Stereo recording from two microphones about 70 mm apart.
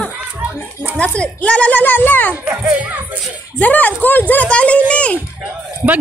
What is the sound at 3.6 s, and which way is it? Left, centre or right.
Speech, left.